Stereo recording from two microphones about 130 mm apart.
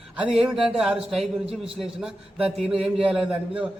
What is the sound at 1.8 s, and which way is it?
A man's voice, 5° right (ahead or behind).